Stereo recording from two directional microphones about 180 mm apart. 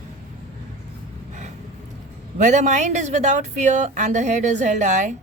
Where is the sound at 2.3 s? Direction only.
45° right (ahead or behind).